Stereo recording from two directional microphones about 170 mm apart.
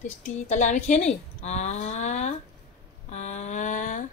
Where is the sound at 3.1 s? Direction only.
45° left (ahead or behind).